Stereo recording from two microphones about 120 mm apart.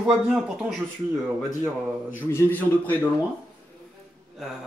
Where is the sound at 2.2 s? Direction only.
15° left (ahead or behind).